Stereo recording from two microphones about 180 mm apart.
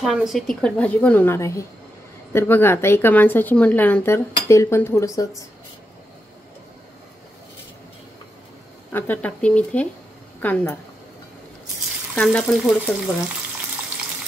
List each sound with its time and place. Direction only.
0.0 s speech: 5° right (ahead or behind); by 5.3 s 20° left (ahead or behind)
8.9 s speech: 10° left (ahead or behind)
12.2 s speech: 5° left (ahead or behind)